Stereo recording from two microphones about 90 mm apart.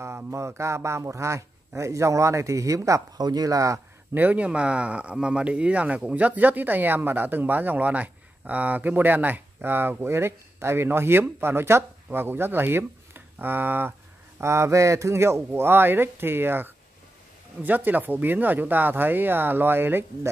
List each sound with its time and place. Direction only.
0.0 s speech: 30° right (ahead or behind)
4.1 s speech: 20° right (ahead or behind)
14.4 s speech: 35° right (ahead or behind)